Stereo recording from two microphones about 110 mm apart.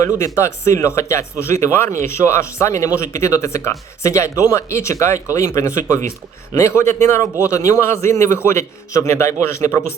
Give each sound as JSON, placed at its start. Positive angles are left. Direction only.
{"t": 0.3, "sound": "speech", "side_deg": 25}